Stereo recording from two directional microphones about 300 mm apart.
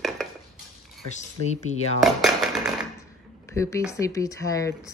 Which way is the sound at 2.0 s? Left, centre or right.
Centre.